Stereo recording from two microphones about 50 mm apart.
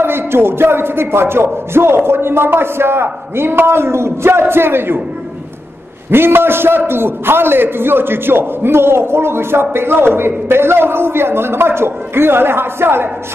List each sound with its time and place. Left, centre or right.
0.0 s a man's voice: right
6.0 s a man's voice: right